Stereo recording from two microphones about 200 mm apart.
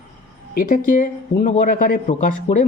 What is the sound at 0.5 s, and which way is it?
A man's voice, 45° left (ahead or behind).